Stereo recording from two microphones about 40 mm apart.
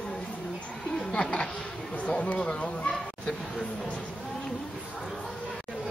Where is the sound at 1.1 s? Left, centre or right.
Left.